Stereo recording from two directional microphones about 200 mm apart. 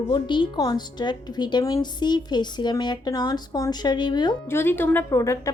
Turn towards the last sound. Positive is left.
turn(degrees=15)  # may be behind; listen again after turning